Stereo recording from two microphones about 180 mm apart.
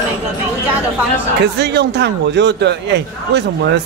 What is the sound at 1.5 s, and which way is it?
A man's voice, 65° right (ahead or behind).